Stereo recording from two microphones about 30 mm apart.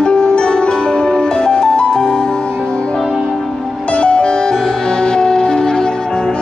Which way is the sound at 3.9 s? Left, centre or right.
Left.